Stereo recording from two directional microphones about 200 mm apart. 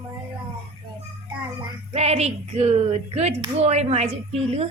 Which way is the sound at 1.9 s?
30° right (ahead or behind).